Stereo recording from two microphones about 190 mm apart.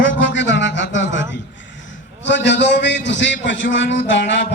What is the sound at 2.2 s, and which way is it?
A man's voice, 70° left (ahead or behind).